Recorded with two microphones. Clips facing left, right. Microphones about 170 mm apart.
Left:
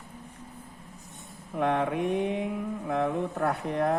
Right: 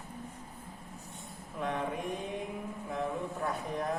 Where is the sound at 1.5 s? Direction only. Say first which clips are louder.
Left 8 dB; 65° left (ahead or behind).